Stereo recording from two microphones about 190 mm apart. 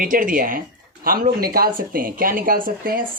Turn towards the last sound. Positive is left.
turn(degrees=-50)  # may be behind; listen again after turning